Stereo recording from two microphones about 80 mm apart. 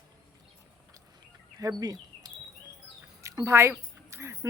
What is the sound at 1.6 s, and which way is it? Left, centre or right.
Speech, right.